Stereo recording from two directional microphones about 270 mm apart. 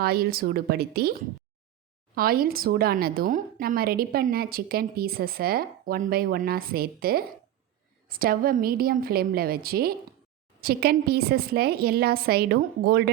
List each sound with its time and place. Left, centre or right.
0.0 s a woman's voice: right
2.1 s a woman's voice: right